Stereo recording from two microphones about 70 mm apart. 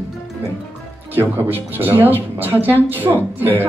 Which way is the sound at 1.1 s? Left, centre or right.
Right.